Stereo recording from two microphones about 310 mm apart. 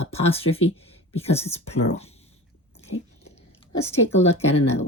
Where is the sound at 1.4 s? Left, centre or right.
Centre.